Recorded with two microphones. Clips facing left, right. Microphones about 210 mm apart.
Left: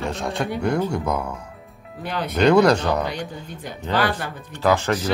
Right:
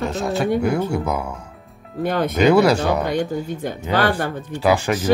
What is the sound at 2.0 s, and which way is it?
Speech, 45° right (ahead or behind).